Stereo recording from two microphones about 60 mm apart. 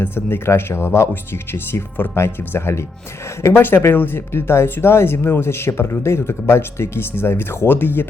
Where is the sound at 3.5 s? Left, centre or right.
Left.